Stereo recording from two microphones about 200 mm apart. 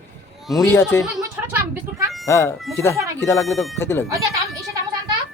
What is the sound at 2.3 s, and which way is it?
Speech, 15° left (ahead or behind).